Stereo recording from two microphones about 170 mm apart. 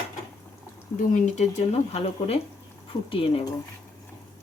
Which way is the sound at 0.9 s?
50° left (ahead or behind).